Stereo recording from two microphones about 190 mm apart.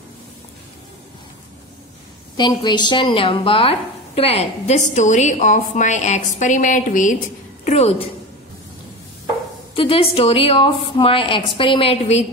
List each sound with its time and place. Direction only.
2.3 s speech: 20° left (ahead or behind)
9.8 s a woman's voice: 30° left (ahead or behind)